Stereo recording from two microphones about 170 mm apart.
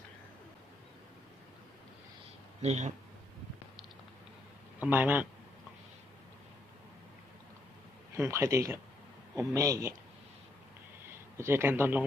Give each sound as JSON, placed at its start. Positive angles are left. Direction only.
{"t": 2.6, "sound": "speech", "side_deg": -40}
{"t": 4.8, "sound": "speech", "side_deg": -10}
{"t": 8.1, "sound": "speech", "side_deg": -15}
{"t": 9.3, "sound": "a man's voice", "side_deg": 0}
{"t": 9.6, "sound": "speech", "side_deg": -20}
{"t": 11.3, "sound": "speech", "side_deg": -15}